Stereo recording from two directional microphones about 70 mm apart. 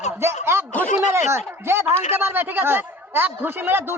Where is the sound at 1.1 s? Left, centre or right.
Right.